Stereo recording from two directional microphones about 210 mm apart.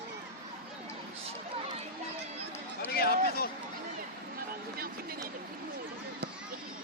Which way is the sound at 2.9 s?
45° left (ahead or behind).